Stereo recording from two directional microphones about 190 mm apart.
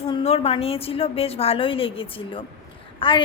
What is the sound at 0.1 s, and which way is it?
A woman's voice, 30° left (ahead or behind).